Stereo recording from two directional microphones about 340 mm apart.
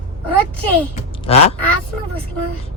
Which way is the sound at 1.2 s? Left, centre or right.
Centre.